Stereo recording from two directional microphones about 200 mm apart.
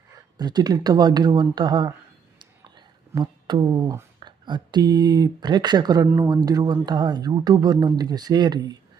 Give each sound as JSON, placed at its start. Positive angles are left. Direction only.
{"t": 0.3, "sound": "speech", "side_deg": -20}